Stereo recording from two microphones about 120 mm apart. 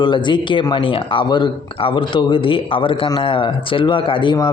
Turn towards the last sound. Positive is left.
turn(degrees=40)  # may be behind; listen again after turning